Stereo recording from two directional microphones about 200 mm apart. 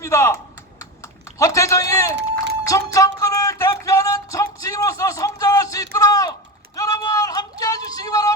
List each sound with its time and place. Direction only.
0.0 s speech: 15° left (ahead or behind)
0.8 s typing: 15° left (ahead or behind)
2.6 s music: 15° left (ahead or behind)
6.7 s a sound: 15° left (ahead or behind)